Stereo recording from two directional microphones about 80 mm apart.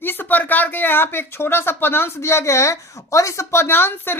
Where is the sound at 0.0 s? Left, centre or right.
Left.